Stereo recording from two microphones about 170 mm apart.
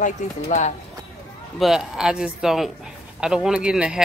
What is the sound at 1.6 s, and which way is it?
Speech, centre (ahead or behind).